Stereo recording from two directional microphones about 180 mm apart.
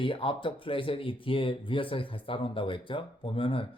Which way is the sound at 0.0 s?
30° left (ahead or behind).